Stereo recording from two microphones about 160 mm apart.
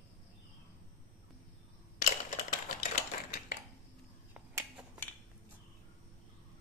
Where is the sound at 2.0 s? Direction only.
50° left (ahead or behind).